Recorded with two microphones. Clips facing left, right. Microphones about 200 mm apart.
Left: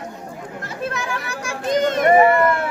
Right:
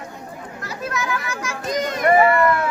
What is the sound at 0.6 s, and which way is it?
Children playing, 30° left (ahead or behind).